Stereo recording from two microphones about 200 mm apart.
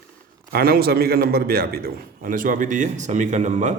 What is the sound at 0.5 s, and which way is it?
A man's voice, 50° right (ahead or behind).